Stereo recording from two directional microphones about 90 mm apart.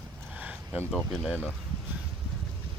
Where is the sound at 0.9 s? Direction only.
5° right (ahead or behind).